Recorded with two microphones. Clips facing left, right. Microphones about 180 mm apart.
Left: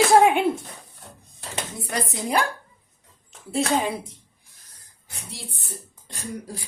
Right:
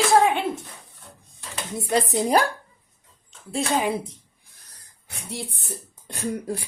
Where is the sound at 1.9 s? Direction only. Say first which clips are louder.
Right 6 dB; 25° right (ahead or behind).